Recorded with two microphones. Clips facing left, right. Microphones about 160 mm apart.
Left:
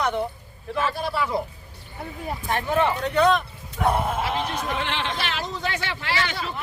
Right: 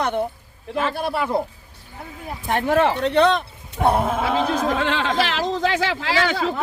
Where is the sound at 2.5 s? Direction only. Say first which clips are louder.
Right 4 dB; 70° right (ahead or behind).